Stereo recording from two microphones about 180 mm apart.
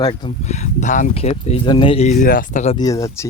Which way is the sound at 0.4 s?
40° left (ahead or behind).